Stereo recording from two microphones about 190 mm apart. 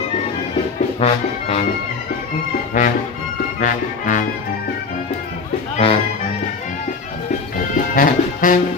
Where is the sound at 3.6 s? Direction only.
45° left (ahead or behind).